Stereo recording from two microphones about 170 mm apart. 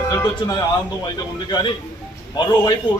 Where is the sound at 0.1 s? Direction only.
25° left (ahead or behind).